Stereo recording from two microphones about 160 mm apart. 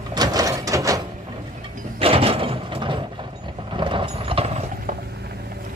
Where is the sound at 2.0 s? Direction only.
35° right (ahead or behind).